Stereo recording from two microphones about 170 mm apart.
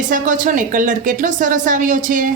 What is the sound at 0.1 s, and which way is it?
Speech, 50° right (ahead or behind).